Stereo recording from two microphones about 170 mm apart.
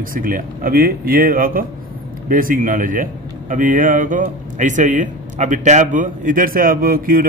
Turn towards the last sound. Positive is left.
turn(degrees=-60)  # may be behind; listen again after turning